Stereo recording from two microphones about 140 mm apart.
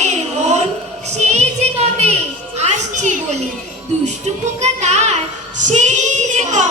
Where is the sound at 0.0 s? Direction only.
55° right (ahead or behind).